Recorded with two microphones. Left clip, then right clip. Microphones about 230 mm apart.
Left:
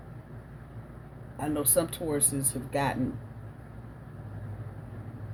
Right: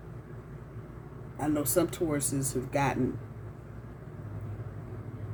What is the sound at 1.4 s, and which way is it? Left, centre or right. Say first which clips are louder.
A man's voice: even; centre.